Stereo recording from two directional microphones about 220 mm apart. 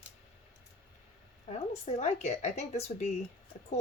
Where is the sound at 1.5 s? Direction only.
30° left (ahead or behind).